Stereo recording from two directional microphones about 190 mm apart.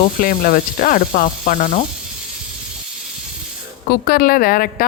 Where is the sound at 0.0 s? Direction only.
45° left (ahead or behind).